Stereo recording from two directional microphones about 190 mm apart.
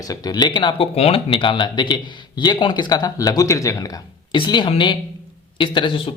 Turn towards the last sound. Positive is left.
turn(degrees=25)  # may be behind; listen again after turning